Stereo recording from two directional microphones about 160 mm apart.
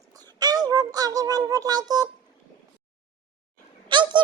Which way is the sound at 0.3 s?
25° right (ahead or behind).